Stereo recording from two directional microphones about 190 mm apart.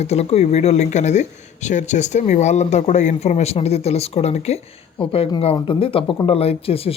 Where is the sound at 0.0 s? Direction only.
35° left (ahead or behind).